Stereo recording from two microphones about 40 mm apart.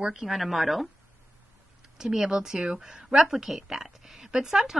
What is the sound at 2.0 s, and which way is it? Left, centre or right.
A woman's voice, centre.